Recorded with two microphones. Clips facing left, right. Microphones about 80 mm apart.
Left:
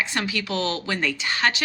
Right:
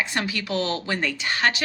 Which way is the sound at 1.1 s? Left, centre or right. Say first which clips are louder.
Even; right.